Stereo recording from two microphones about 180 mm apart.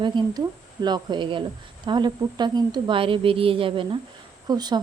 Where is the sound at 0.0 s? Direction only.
25° right (ahead or behind).